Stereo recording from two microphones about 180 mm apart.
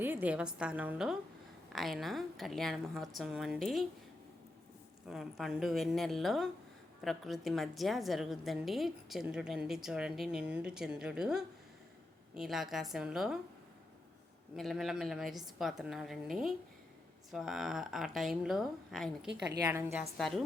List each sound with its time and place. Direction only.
0.0 s a woman's voice: 10° right (ahead or behind)
5.0 s a woman's voice: centre (ahead or behind)
14.5 s a woman's voice: centre (ahead or behind)
19.5 s a woman's voice: 20° right (ahead or behind)
20.1 s a woman's voice: centre (ahead or behind)